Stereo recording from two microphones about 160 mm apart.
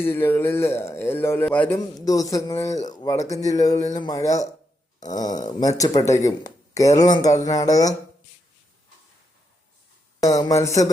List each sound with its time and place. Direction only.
0.0 s speech: 15° left (ahead or behind)
2.0 s speech: 20° left (ahead or behind)
10.2 s speech: 20° left (ahead or behind)